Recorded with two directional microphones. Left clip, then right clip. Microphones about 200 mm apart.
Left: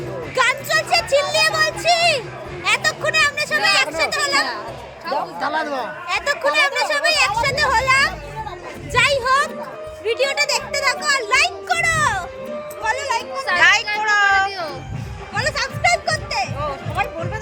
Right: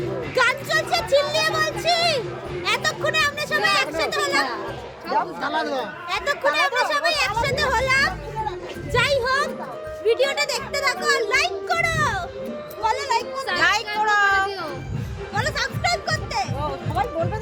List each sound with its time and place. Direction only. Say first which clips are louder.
0.3 s a sound: left 2 dB; 10° left (ahead or behind)
2.6 s speech: left 4 dB; 15° left (ahead or behind)
5.4 s speech: left 2 dB; 35° left (ahead or behind)
6.1 s a child's voice: left 3 dB; 15° left (ahead or behind)
13.6 s a child's voice: left 5 dB; 30° right (ahead or behind)
15.4 s music: left 3 dB; 10° left (ahead or behind)